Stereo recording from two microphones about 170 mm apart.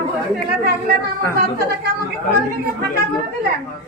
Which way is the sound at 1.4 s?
70° right (ahead or behind).